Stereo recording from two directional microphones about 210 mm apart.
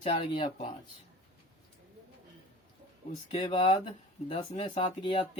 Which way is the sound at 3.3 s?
30° left (ahead or behind).